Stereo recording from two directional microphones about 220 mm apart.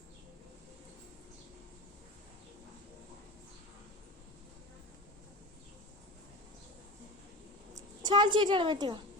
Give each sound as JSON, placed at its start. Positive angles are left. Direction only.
{"t": 7.8, "sound": "a woman's voice", "side_deg": -20}